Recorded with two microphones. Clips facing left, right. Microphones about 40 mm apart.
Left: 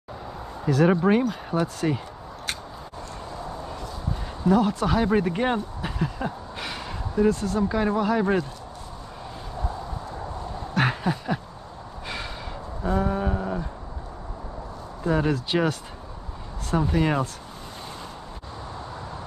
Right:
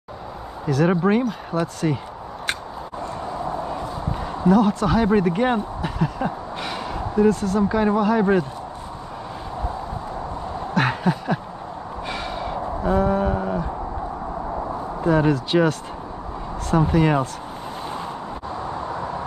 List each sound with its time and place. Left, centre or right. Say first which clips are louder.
0.7 s speech: right 1 dB; centre
4.5 s speech: right 3 dB; centre
6.0 s a sound: right 5 dB; centre
7.6 s speech: right 4 dB; centre
10.8 s a sound: right 3 dB; centre
15.0 s speech: right 5 dB; centre
16.7 s speech: right 4 dB; centre
18.7 s vehicle: right 8 dB; right